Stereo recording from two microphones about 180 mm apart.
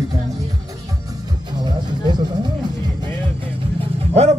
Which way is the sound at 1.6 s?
25° right (ahead or behind).